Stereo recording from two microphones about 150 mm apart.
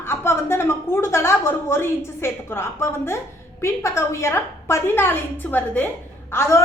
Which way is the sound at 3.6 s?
20° left (ahead or behind).